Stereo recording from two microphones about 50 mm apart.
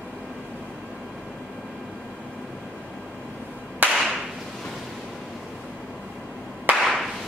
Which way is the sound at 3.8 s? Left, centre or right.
Right.